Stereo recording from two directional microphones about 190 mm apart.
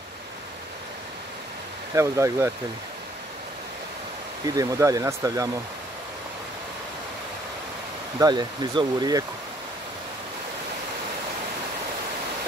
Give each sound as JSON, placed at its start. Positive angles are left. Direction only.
{"t": 2.0, "sound": "speech", "side_deg": -15}
{"t": 4.5, "sound": "speech", "side_deg": -20}
{"t": 8.2, "sound": "speech", "side_deg": -20}